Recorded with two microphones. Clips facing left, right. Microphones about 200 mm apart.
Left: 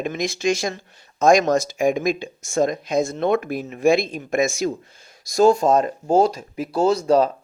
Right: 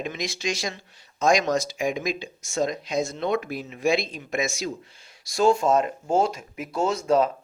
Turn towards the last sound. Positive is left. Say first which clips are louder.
# left 5 dB
turn(degrees=35)  # may be behind; listen again after turning